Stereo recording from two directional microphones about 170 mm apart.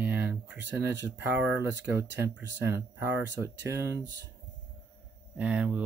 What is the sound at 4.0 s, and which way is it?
Speech, 90° right.